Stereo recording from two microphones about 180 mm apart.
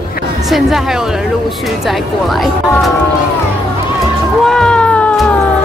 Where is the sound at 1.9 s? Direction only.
Centre (ahead or behind).